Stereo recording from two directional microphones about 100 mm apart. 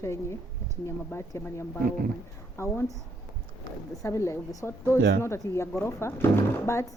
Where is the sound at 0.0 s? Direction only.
25° left (ahead or behind).